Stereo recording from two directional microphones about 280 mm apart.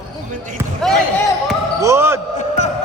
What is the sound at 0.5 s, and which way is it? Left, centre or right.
Basketball bounce, centre.